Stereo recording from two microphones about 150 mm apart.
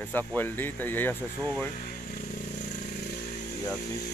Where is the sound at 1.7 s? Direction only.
65° left (ahead or behind).